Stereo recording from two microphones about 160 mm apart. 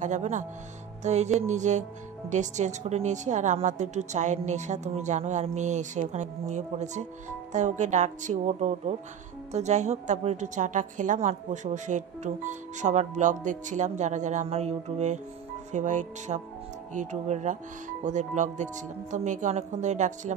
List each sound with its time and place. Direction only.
0.0 s a woman's voice: 50° right (ahead or behind)